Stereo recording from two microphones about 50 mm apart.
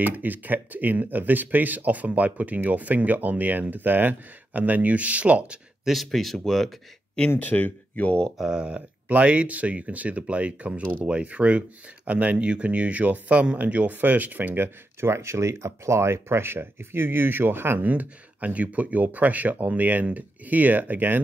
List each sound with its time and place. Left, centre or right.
0.0 s speech: right
5.9 s speech: centre
7.2 s speech: left
8.4 s speech: centre
8.6 s speech: right
17.8 s speech: right